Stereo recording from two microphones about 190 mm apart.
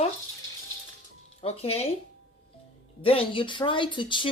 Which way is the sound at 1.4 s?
30° left (ahead or behind).